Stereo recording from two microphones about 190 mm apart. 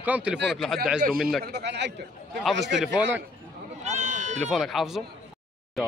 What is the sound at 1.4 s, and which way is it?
Speech, 60° right (ahead or behind).